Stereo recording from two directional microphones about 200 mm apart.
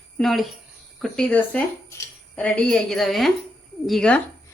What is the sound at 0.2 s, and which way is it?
Speech, centre (ahead or behind).